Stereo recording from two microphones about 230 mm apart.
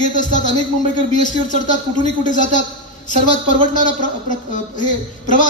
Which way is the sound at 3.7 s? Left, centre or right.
Left.